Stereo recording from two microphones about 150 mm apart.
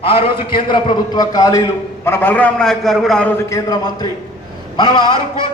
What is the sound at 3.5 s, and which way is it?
A man's voice, 25° left (ahead or behind).